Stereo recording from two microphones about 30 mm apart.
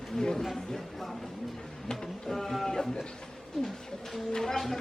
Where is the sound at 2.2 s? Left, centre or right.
Centre.